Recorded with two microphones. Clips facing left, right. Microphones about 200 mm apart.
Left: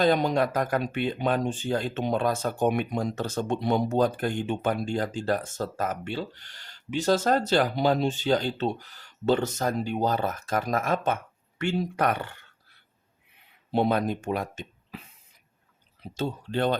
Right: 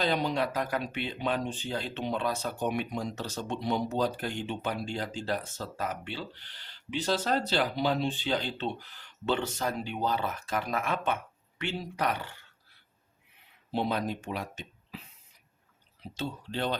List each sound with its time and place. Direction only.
0.0 s speech: 50° left (ahead or behind)
13.7 s speech: 55° left (ahead or behind)
16.1 s speech: 50° left (ahead or behind)